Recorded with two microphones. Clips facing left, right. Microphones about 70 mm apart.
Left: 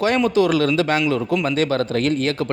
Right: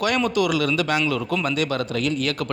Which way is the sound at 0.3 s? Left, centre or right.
Left.